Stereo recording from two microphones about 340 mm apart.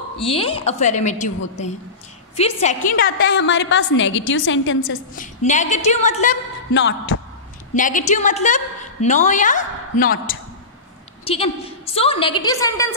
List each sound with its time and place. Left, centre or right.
0.2 s a woman's voice: centre
2.3 s a woman's voice: centre
6.7 s music: left
7.7 s a woman's voice: left